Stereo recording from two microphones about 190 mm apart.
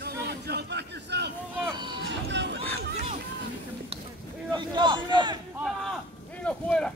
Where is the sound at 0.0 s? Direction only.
60° right (ahead or behind).